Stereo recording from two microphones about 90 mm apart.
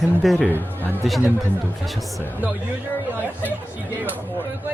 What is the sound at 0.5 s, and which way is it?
Speech, 20° left (ahead or behind).